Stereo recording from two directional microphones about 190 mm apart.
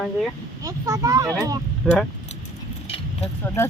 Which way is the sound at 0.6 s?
20° right (ahead or behind).